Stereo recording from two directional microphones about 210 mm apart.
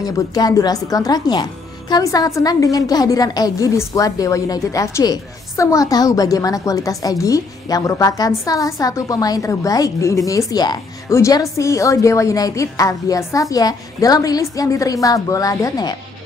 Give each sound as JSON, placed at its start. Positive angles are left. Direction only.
{"t": 0.0, "sound": "a woman's voice", "side_deg": 15}